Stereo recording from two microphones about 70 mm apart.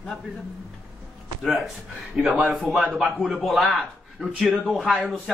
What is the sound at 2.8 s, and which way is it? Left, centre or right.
Speech, right.